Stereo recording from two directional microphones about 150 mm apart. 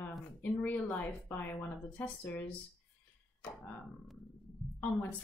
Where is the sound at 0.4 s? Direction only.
10° left (ahead or behind).